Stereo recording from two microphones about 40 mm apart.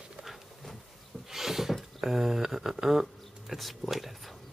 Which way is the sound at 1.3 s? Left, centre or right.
Centre.